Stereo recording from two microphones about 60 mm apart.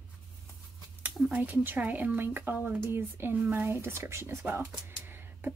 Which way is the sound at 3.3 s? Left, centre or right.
Right.